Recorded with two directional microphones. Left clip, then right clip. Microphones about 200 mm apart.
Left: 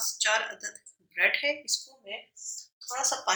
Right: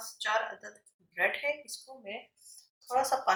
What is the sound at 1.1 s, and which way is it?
Speech, 40° left (ahead or behind).